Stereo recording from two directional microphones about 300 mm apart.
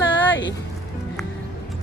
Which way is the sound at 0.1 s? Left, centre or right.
Left.